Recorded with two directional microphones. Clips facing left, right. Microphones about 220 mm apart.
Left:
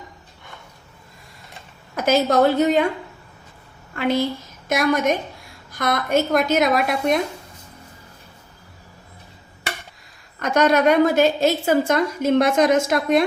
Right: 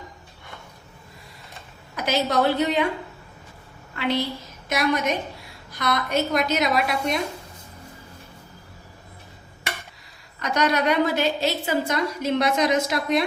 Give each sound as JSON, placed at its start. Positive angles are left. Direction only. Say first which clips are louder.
{"t": 2.0, "sound": "a woman's voice", "louder": "left 5 dB", "side_deg": 45}
{"t": 3.9, "sound": "a woman's voice", "louder": "left 4 dB", "side_deg": 50}
{"t": 10.4, "sound": "a woman's voice", "louder": "left 6 dB", "side_deg": 50}